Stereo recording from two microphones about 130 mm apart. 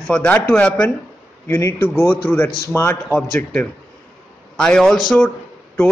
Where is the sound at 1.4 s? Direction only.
25° left (ahead or behind).